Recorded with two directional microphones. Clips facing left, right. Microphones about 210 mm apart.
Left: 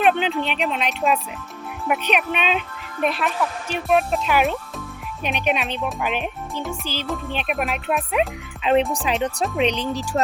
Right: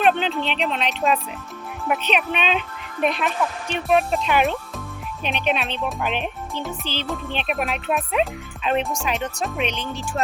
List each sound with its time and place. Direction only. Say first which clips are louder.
0.0 s speech: left 1 dB; 10° left (ahead or behind)
8.9 s speech: left 3 dB; 30° left (ahead or behind)